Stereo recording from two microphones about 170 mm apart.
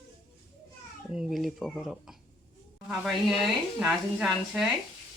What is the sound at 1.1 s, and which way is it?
Speech, centre (ahead or behind).